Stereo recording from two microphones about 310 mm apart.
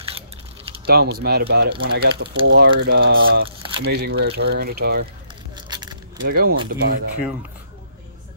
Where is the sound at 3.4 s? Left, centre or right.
Centre.